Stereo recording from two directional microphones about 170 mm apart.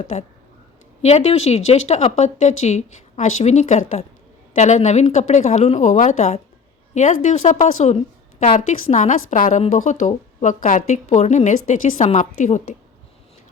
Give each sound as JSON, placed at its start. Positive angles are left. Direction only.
{"t": 0.0, "sound": "a woman's voice", "side_deg": 40}